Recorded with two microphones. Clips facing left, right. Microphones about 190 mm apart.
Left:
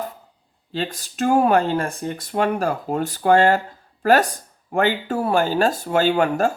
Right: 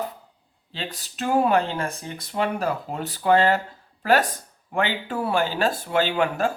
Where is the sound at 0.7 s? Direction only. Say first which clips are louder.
Left 7 dB; 45° left (ahead or behind).